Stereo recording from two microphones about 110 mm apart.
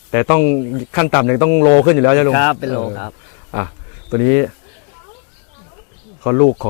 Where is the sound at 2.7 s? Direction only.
25° left (ahead or behind).